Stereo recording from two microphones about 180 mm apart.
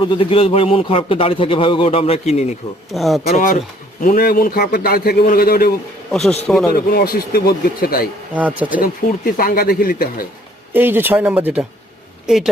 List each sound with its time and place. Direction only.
0.0 s a man's voice: 30° left (ahead or behind)
2.9 s speech: centre (ahead or behind)
3.3 s speech: 50° left (ahead or behind)
6.1 s speech: centre (ahead or behind)
6.9 s speech: 60° left (ahead or behind)
8.4 s speech: 10° right (ahead or behind)
8.8 s speech: 55° left (ahead or behind)
10.7 s speech: 10° right (ahead or behind)